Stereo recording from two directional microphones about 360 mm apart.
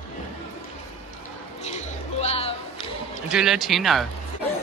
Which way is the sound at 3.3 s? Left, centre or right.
Centre.